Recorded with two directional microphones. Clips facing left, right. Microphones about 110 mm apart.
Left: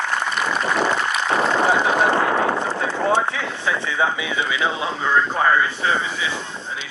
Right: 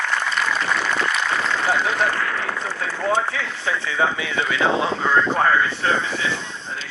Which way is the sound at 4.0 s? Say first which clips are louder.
Right 1 dB; 15° left (ahead or behind).